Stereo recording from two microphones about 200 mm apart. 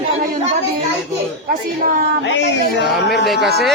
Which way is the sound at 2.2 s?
60° left (ahead or behind).